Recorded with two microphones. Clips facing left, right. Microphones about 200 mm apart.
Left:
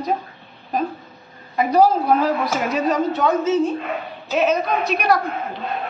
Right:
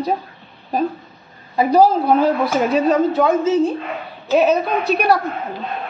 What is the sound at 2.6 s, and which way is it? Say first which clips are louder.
A man's voice: right 4 dB; 30° right (ahead or behind).